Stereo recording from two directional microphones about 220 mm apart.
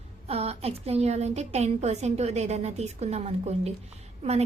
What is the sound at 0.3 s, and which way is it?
A woman's voice, 30° right (ahead or behind).